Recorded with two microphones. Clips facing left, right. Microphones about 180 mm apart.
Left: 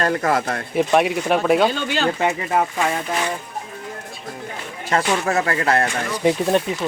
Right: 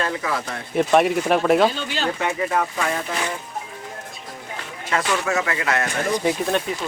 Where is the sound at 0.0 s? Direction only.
50° left (ahead or behind).